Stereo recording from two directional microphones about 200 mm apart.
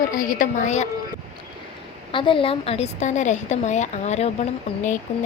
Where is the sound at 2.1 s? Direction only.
25° left (ahead or behind).